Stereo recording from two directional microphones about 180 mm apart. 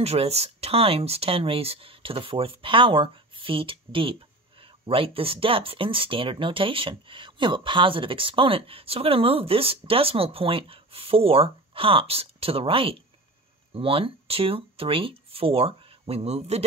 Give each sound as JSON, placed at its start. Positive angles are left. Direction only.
{"t": 0.0, "sound": "speech", "side_deg": -35}